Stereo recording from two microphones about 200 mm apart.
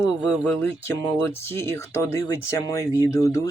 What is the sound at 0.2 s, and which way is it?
Speech, 5° left (ahead or behind).